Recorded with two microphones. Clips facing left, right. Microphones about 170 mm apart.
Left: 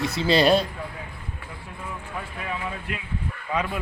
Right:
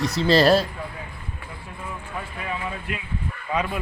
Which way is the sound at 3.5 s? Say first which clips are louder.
Right 1 dB; 20° right (ahead or behind).